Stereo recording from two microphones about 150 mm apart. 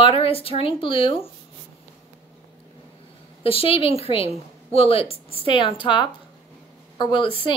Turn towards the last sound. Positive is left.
turn(degrees=35)  # may be behind; listen again after turning